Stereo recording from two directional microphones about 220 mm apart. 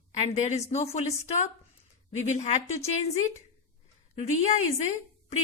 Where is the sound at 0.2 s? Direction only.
30° left (ahead or behind).